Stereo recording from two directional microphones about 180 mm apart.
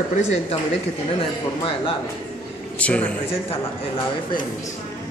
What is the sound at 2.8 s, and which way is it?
Speech, 5° left (ahead or behind).